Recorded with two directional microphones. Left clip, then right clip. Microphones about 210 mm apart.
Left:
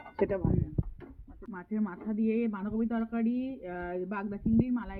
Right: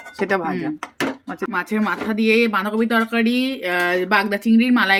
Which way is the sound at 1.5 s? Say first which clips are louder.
Right 16 dB; centre (ahead or behind).